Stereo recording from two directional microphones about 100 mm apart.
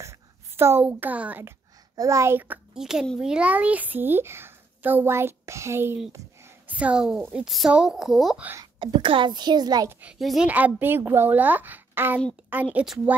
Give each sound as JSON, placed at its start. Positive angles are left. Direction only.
{"t": 0.6, "sound": "a child's voice", "side_deg": -25}
{"t": 2.0, "sound": "a child's voice", "side_deg": -30}
{"t": 2.7, "sound": "a woman's voice", "side_deg": -5}
{"t": 6.7, "sound": "a child's voice", "side_deg": -15}
{"t": 8.7, "sound": "a child's voice", "side_deg": -45}
{"t": 10.1, "sound": "a woman's voice", "side_deg": 0}
{"t": 10.4, "sound": "a child's voice", "side_deg": -15}